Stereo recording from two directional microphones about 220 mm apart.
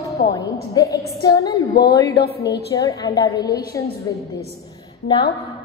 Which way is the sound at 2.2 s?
45° left (ahead or behind).